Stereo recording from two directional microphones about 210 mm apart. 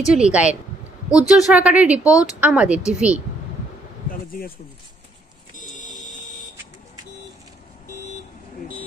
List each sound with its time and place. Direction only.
0.1 s speech: 5° right (ahead or behind)
4.1 s a sound: 45° left (ahead or behind)
6.0 s buzzer: 35° left (ahead or behind)